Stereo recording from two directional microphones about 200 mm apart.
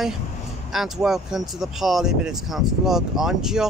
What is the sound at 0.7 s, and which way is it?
Speech, centre (ahead or behind).